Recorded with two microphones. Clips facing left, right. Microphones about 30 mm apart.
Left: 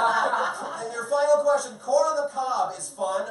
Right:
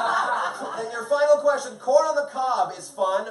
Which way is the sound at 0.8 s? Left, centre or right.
Centre.